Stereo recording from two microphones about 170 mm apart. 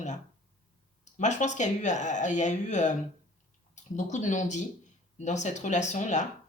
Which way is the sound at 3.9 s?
45° left (ahead or behind).